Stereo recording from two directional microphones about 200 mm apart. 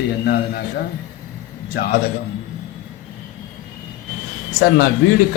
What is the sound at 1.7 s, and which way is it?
Speech, 50° left (ahead or behind).